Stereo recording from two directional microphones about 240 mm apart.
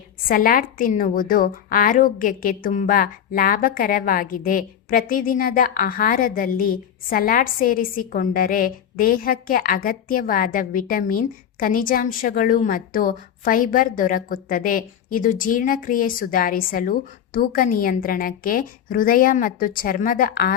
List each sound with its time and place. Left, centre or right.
0.3 s a woman's voice: left